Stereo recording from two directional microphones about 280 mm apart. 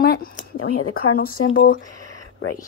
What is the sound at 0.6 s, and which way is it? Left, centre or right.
Speech, left.